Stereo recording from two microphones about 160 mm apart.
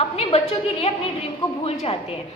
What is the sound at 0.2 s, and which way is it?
A woman's voice, 40° left (ahead or behind).